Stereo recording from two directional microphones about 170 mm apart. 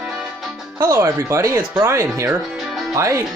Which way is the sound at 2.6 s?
Centre (ahead or behind).